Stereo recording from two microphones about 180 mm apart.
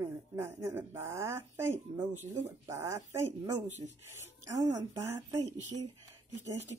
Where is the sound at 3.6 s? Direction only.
40° right (ahead or behind).